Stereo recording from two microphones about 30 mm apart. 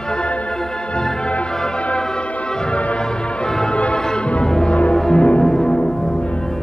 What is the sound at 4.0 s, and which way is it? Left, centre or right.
Music, left.